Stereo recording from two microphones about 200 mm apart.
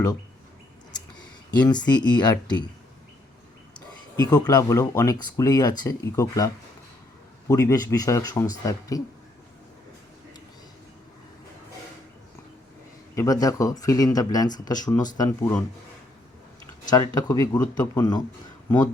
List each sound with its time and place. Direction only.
1.5 s speech: 20° left (ahead or behind)
3.8 s speech: 20° left (ahead or behind)
13.1 s speech: 20° left (ahead or behind)
16.9 s speech: 20° left (ahead or behind)